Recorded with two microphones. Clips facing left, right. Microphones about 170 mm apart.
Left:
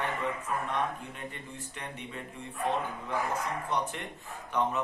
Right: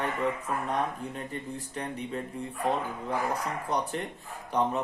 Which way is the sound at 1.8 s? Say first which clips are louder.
Right 8 dB; 35° right (ahead or behind).